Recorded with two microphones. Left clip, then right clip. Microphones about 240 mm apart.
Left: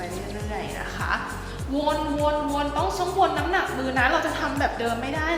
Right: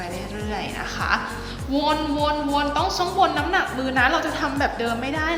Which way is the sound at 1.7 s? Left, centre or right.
Centre.